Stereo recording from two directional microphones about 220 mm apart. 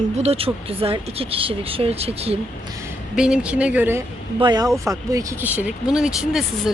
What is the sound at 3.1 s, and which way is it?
Speech, 5° right (ahead or behind).